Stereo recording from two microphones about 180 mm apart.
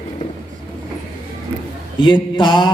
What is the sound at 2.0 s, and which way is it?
Mantra, 25° left (ahead or behind).